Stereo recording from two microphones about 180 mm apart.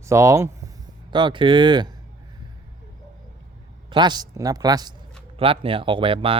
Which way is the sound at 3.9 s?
25° right (ahead or behind).